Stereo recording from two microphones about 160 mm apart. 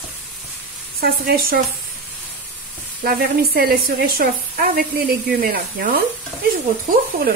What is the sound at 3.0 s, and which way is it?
A woman's voice, 70° right (ahead or behind).